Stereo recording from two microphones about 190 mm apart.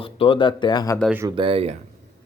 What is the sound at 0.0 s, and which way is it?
Speech, 30° left (ahead or behind).